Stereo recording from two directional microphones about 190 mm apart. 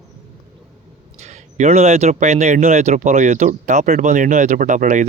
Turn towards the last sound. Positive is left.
turn(degrees=-40)  # may be behind; listen again after turning